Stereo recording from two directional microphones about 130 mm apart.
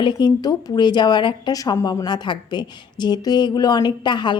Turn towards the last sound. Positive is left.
turn(degrees=35)  # may be behind; listen again after turning